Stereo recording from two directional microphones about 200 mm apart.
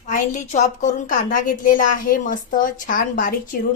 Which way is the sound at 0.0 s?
40° left (ahead or behind).